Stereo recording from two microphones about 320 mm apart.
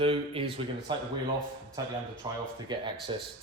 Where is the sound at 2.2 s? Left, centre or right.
Centre.